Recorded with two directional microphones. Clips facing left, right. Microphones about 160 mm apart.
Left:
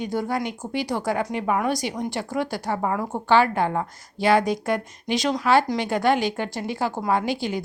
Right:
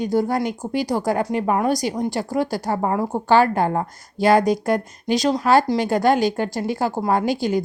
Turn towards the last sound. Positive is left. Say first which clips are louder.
# right 4 dB
turn(degrees=-40)  # may be behind; listen again after turning